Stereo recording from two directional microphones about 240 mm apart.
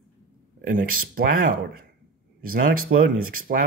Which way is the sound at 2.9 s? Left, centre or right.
Right.